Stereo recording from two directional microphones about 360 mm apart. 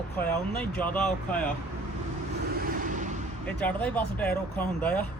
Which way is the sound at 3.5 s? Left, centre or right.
Centre.